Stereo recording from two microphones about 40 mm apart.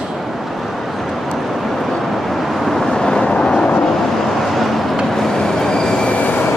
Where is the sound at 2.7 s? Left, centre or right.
Centre.